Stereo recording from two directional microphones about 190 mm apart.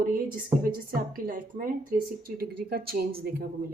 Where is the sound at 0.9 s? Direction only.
50° right (ahead or behind).